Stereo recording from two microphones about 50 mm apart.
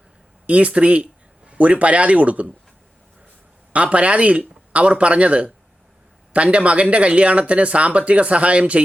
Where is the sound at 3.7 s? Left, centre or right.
Right.